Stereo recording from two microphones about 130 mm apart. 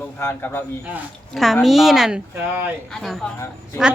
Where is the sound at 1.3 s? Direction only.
Centre (ahead or behind).